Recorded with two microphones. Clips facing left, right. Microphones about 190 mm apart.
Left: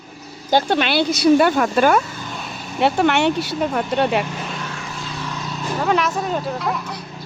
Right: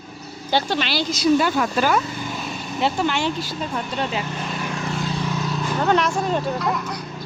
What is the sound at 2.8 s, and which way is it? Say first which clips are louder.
Speech: left 5 dB; 65° left (ahead or behind).